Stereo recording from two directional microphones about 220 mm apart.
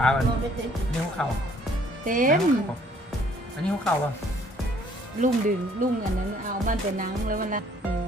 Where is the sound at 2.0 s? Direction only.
40° right (ahead or behind).